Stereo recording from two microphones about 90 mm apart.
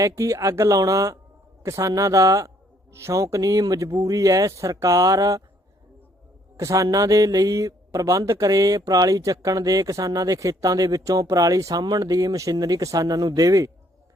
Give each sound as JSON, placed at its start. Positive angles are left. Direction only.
{"t": 0.0, "sound": "speech", "side_deg": -35}
{"t": 6.6, "sound": "speech", "side_deg": -35}